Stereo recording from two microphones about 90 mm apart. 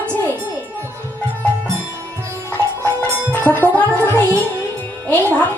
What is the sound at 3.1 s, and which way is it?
Music, 20° left (ahead or behind).